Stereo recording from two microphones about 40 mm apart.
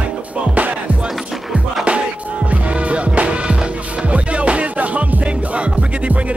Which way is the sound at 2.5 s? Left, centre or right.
Right.